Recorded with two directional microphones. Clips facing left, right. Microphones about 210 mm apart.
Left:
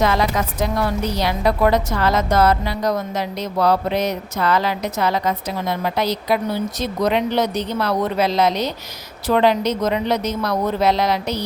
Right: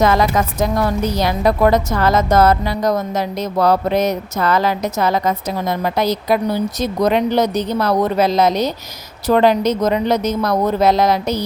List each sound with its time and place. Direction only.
0.0 s a woman's voice: 45° right (ahead or behind)